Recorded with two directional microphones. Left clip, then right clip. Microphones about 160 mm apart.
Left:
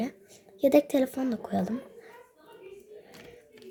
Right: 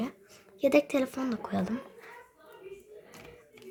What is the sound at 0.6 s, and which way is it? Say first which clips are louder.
Speech: left 3 dB; 5° left (ahead or behind).